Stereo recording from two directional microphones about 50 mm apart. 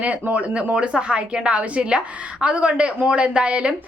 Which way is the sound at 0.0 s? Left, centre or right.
Right.